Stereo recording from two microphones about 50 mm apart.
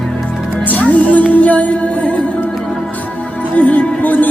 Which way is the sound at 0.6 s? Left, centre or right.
Left.